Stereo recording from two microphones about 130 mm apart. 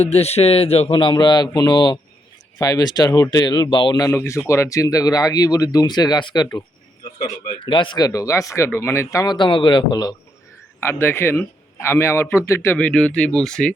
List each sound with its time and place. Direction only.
0.0 s speech: 55° left (ahead or behind)
0.9 s speech: 35° left (ahead or behind)
7.6 s speech: 40° left (ahead or behind)
10.8 s speech: 20° left (ahead or behind)